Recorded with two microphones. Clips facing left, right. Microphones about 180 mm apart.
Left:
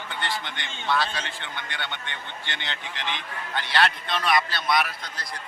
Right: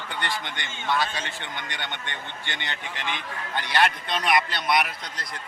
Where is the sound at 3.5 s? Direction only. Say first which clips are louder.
Even; 15° right (ahead or behind).